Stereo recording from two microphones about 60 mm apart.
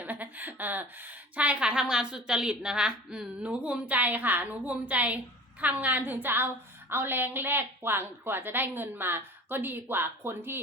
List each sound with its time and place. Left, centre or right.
0.0 s a woman's voice: right; by 3.2 s centre
3.4 s a woman's voice: right